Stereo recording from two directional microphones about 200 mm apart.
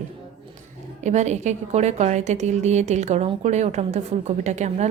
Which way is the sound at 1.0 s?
35° right (ahead or behind).